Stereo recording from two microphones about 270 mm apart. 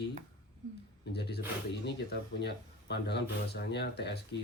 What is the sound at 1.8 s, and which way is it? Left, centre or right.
Speech, left.